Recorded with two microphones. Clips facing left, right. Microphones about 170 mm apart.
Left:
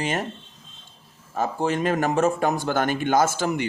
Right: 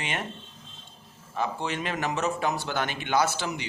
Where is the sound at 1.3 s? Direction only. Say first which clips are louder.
Left 6 dB; 45° left (ahead or behind).